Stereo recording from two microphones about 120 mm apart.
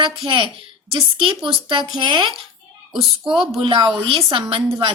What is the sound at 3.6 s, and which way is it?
Speech, 45° right (ahead or behind).